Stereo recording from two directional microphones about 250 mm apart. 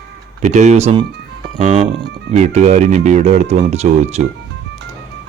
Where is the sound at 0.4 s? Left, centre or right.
Right.